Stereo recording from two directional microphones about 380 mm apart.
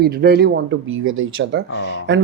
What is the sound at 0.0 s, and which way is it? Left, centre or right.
Speech, right.